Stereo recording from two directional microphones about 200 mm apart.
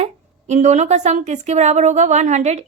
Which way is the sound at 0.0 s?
35° right (ahead or behind).